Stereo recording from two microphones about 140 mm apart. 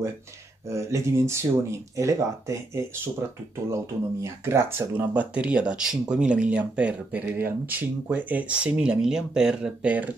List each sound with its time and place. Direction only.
0.7 s speech: 20° right (ahead or behind)